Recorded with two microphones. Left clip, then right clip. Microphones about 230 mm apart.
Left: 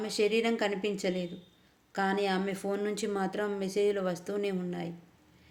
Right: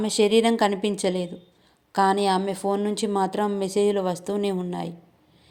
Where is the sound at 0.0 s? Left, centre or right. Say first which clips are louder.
Right 9 dB; right.